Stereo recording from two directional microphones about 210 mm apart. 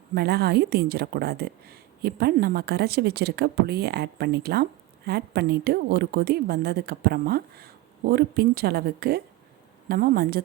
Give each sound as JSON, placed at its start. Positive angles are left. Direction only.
{"t": 0.1, "sound": "speech", "side_deg": -50}